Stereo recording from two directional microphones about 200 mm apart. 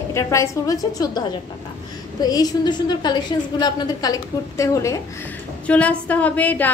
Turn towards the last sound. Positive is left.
turn(degrees=10)  # may be behind; listen again after turning